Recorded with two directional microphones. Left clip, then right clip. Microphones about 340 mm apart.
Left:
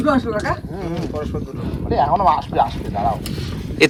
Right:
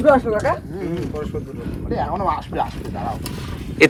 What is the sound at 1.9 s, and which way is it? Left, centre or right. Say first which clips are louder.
Speech: left 7 dB; centre.